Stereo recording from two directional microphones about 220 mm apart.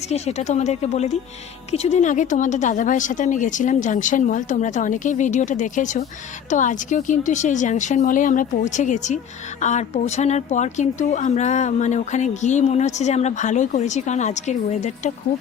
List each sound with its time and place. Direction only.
0.1 s a woman's voice: 30° left (ahead or behind)